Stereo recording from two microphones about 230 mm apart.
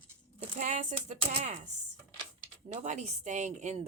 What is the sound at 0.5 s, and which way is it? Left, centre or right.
Speech, right.